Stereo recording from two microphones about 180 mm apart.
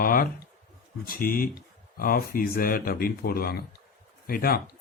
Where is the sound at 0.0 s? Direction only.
55° left (ahead or behind).